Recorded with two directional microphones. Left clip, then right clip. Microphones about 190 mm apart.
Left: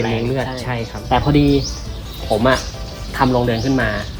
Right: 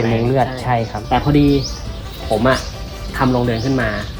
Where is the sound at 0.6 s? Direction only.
35° right (ahead or behind).